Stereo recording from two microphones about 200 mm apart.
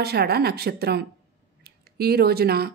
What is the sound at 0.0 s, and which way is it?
A woman's voice, 50° right (ahead or behind).